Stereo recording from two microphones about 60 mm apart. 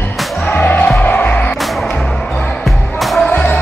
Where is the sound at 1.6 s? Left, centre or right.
Centre.